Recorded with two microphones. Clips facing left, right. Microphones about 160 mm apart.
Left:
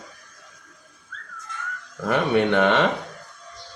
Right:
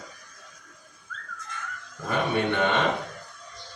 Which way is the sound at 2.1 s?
90° left.